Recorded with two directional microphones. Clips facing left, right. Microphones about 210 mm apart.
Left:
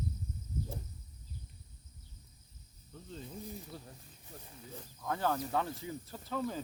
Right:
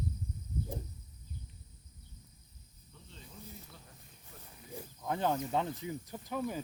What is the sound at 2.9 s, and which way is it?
Snake, 40° left (ahead or behind).